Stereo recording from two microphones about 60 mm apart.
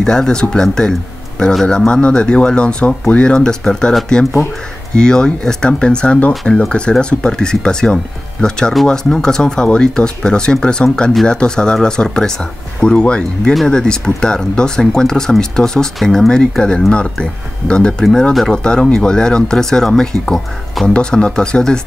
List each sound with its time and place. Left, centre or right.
0.0 s speech: centre
1.9 s speech: centre